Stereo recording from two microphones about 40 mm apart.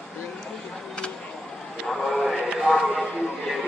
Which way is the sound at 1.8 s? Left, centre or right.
Centre.